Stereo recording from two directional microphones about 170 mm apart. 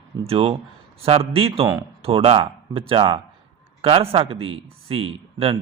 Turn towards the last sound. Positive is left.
turn(degrees=-35)  # may be behind; listen again after turning